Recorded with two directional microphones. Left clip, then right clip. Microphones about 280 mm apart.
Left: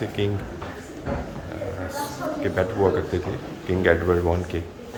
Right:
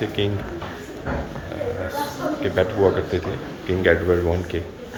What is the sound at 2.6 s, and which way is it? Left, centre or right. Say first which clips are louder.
Speech: right 3 dB; centre.